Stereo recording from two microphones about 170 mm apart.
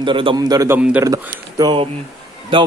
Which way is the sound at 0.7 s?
10° right (ahead or behind).